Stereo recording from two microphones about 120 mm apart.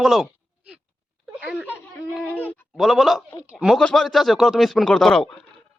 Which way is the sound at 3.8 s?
5° left (ahead or behind).